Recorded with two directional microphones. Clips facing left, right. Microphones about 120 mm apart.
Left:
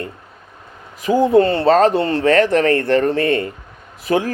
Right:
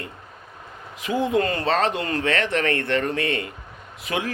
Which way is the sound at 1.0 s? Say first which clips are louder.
Left 9 dB; 35° left (ahead or behind).